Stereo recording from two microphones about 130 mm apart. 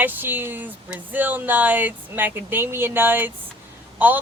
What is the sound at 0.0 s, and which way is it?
Speech, 15° right (ahead or behind).